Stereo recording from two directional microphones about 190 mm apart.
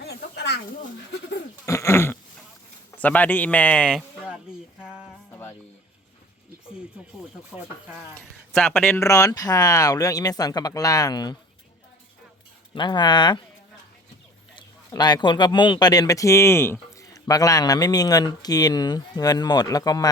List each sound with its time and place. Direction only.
0.0 s a sound: 60° left (ahead or behind)
1.6 s a sound: 15° left (ahead or behind)
3.0 s speech: 10° left (ahead or behind)
4.8 s a sound: 5° right (ahead or behind)
5.3 s music: 10° left (ahead or behind)
8.1 s speech: 5° left (ahead or behind)
9.0 s a man's voice: 15° left (ahead or behind)
12.7 s a man's voice: 25° left (ahead or behind)
14.5 s a man's voice: 20° left (ahead or behind)